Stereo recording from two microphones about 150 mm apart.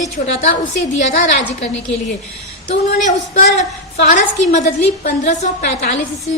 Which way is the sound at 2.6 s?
55° left (ahead or behind).